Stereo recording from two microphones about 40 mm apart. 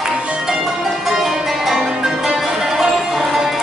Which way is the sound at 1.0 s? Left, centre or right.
Centre.